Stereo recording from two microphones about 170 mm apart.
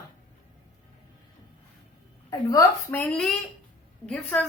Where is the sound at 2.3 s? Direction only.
20° left (ahead or behind).